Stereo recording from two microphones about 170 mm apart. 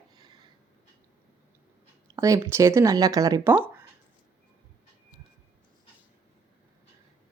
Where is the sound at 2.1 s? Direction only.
20° right (ahead or behind).